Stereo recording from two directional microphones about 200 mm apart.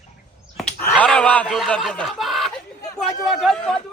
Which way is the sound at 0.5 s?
5° left (ahead or behind).